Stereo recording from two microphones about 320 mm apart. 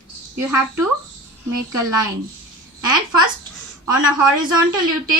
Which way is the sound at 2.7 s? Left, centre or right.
Centre.